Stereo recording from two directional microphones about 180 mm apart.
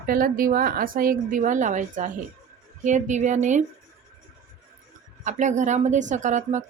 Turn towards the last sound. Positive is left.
turn(degrees=-40)  # may be behind; listen again after turning